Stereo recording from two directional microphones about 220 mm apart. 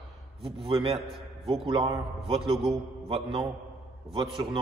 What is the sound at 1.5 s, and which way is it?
Speech, 25° right (ahead or behind).